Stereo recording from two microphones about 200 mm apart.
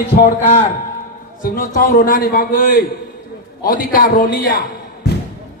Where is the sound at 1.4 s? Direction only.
45° left (ahead or behind).